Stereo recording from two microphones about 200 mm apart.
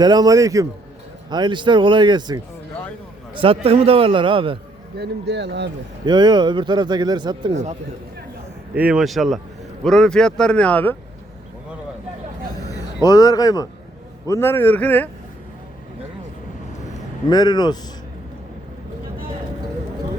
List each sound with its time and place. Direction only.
0.0 s a man's voice: 20° right (ahead or behind)
4.9 s speech: 55° right (ahead or behind)
6.1 s speech: 20° right (ahead or behind)
8.7 s speech: 5° right (ahead or behind)
12.6 s a man's voice: 20° left (ahead or behind)
17.2 s speech: 20° left (ahead or behind)